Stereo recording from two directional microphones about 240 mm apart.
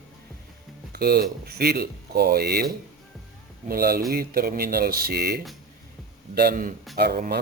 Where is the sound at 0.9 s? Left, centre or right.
Right.